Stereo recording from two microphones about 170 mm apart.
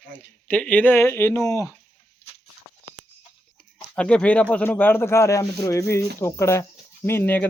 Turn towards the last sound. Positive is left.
turn(degrees=10)  # may be behind; listen again after turning